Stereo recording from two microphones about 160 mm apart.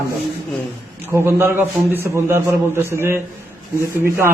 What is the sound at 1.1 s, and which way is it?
A man's voice, 15° right (ahead or behind).